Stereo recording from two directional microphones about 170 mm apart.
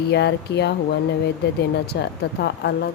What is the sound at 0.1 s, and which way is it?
Speech, 80° left.